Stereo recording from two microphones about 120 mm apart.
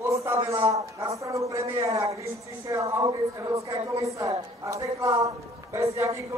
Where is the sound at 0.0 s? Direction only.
25° right (ahead or behind).